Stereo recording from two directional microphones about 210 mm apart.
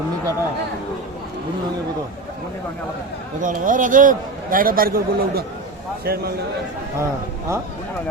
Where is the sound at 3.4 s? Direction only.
40° right (ahead or behind).